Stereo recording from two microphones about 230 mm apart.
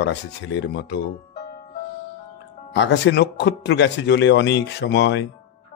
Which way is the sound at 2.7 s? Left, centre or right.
Left.